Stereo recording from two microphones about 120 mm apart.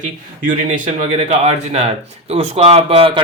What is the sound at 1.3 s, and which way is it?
Speech, 60° right (ahead or behind).